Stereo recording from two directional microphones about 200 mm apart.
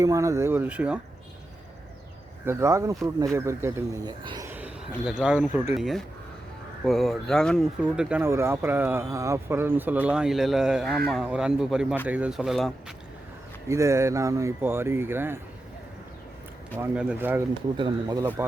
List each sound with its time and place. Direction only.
0.0 s speech: 15° right (ahead or behind)
2.4 s speech: 15° right (ahead or behind)
4.4 s a sound: 10° right (ahead or behind)
5.0 s speech: 5° right (ahead or behind)
13.7 s speech: 15° right (ahead or behind)
16.7 s speech: 10° right (ahead or behind)
17.7 s speech: 20° right (ahead or behind)